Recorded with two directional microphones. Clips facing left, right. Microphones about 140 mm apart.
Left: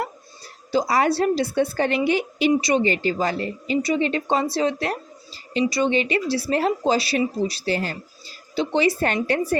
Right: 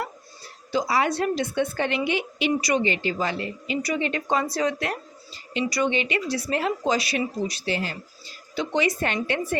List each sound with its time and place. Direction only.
0.7 s a woman's voice: 40° left (ahead or behind)
2.5 s a woman's voice: 25° left (ahead or behind)
2.8 s a woman's voice: 40° left (ahead or behind)